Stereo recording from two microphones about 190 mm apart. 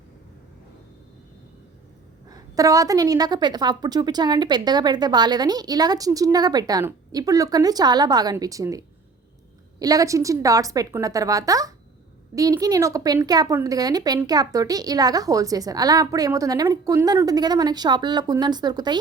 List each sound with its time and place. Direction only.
2.3 s a woman's voice: 20° right (ahead or behind)